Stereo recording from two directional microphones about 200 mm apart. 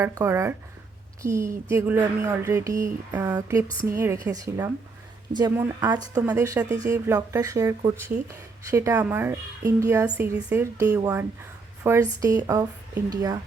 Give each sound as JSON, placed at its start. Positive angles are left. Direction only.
{"t": 0.0, "sound": "speech", "side_deg": -15}